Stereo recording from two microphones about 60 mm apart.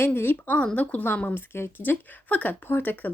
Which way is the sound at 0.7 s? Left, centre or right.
Left.